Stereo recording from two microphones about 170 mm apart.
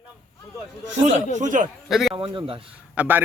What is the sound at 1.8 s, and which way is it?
Speech, centre (ahead or behind).